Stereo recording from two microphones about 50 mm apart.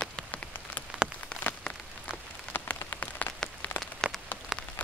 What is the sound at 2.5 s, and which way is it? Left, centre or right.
Rain on surface, left.